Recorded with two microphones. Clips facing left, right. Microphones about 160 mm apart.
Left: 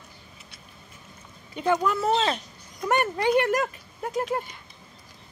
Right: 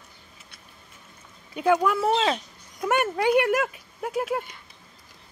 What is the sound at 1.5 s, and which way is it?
Speech, 10° right (ahead or behind).